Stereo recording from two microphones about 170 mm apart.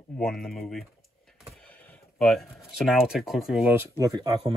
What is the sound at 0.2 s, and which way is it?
Speech, 5° left (ahead or behind).